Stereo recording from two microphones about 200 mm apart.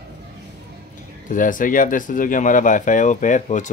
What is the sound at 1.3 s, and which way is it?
Speech, 40° left (ahead or behind).